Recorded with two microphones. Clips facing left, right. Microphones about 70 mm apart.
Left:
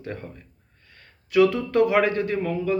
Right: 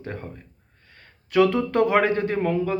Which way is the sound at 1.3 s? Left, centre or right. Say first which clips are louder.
Even; right.